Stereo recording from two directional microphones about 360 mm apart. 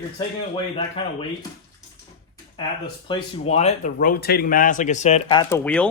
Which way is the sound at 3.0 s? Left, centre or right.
Centre.